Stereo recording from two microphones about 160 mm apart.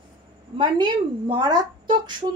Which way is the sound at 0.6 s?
30° right (ahead or behind).